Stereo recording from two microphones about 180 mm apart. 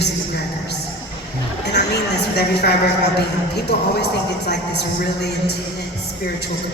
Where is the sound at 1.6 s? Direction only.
65° left (ahead or behind).